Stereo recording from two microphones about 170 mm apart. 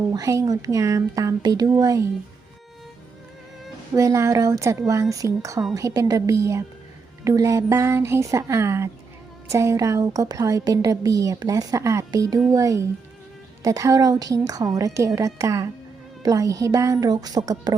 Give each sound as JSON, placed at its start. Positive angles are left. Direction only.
{"t": 0.1, "sound": "a woman's voice", "side_deg": -20}
{"t": 3.9, "sound": "a woman's voice", "side_deg": -20}